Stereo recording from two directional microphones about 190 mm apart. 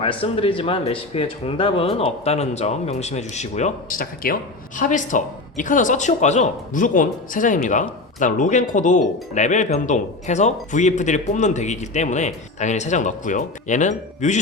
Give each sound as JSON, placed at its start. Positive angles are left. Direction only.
{"t": 0.0, "sound": "speech", "side_deg": 30}